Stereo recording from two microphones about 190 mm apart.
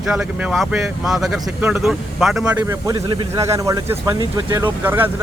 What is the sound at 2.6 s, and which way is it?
Speech, 20° right (ahead or behind).